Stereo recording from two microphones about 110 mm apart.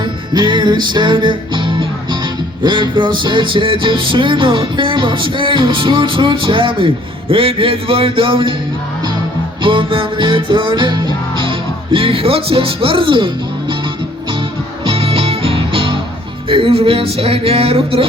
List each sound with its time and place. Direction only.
0.0 s music: 45° right (ahead or behind)
9.6 s music: 50° right (ahead or behind)
14.8 s music: 60° right (ahead or behind)